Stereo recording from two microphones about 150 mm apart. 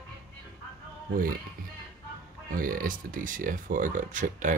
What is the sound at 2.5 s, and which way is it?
Speech, 70° right (ahead or behind).